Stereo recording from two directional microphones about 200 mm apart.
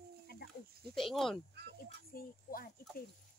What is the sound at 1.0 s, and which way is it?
Speech, centre (ahead or behind).